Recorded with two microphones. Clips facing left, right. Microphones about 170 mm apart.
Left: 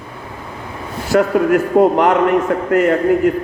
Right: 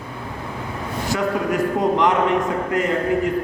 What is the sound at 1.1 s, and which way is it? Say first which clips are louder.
A man's voice: left 9 dB; 65° left (ahead or behind).